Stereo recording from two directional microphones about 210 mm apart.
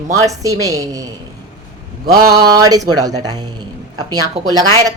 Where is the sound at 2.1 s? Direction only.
20° right (ahead or behind).